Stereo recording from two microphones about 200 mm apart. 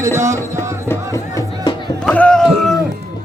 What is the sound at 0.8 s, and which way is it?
Music, 15° left (ahead or behind).